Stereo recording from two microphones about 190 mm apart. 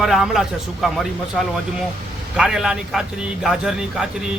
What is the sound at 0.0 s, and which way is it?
A man's voice, centre (ahead or behind).